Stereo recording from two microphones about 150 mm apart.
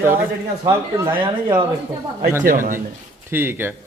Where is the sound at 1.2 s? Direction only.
35° right (ahead or behind).